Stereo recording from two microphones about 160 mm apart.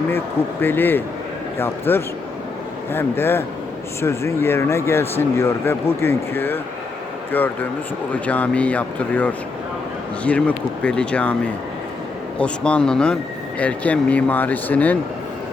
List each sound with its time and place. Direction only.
0.6 s speech: 15° left (ahead or behind)
12.4 s speech: 5° left (ahead or behind)